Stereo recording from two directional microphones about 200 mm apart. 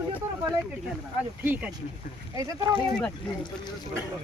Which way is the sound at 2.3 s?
20° right (ahead or behind).